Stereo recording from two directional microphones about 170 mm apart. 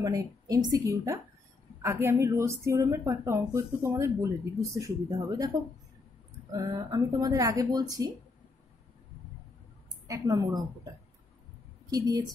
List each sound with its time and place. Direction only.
0.0 s a woman's voice: 20° right (ahead or behind)
6.5 s speech: 20° right (ahead or behind)
10.0 s speech: 20° right (ahead or behind)
11.9 s speech: 20° right (ahead or behind)